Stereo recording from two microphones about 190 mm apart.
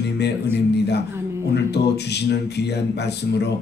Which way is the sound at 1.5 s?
60° left (ahead or behind).